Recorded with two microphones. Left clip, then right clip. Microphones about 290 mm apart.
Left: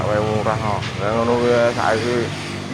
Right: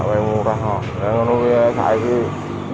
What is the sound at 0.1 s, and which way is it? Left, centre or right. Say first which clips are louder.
Vehicle: right 2 dB; left.